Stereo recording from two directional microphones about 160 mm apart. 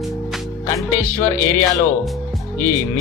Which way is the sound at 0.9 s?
15° left (ahead or behind).